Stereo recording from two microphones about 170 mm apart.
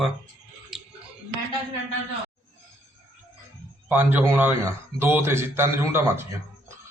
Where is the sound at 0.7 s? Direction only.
Centre (ahead or behind).